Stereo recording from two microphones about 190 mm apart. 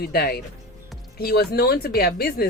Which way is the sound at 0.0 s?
55° left (ahead or behind).